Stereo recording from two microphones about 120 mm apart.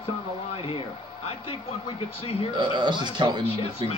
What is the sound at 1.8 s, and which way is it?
Speech, 55° left (ahead or behind).